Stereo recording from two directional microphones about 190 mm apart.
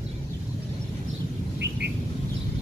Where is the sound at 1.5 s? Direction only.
60° right (ahead or behind).